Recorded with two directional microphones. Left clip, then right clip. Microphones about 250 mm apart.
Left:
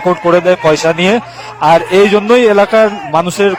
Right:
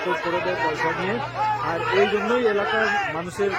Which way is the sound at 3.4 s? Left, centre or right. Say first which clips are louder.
Left 10 dB; left.